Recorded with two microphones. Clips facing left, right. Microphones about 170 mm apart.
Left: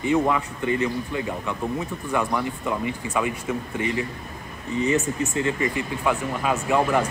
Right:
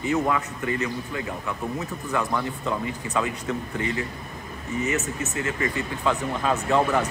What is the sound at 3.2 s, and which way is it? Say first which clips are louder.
Speech: left 1 dB; 15° left (ahead or behind).